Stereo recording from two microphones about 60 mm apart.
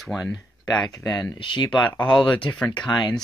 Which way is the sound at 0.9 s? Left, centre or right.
Left.